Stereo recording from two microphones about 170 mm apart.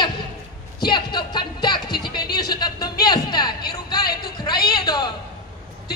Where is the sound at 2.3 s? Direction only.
25° left (ahead or behind).